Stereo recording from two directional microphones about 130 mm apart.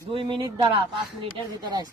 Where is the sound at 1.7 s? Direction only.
30° right (ahead or behind).